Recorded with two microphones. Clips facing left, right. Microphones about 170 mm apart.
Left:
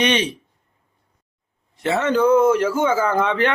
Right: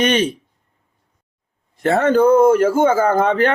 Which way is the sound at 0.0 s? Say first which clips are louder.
Right 3 dB; 50° right (ahead or behind).